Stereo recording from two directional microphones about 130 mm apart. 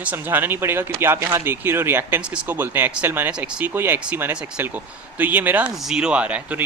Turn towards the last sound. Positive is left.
turn(degrees=-10)  # may be behind; listen again after turning